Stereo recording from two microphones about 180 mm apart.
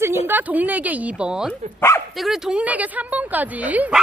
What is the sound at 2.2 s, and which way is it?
A woman's voice, centre (ahead or behind).